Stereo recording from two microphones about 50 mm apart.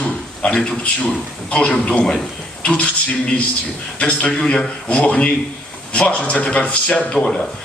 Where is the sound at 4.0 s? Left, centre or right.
Left.